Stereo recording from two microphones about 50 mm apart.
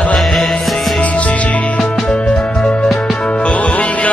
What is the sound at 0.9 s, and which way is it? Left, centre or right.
Music, left.